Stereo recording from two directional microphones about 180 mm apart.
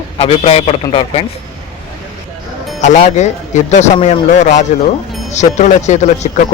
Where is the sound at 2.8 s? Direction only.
40° left (ahead or behind).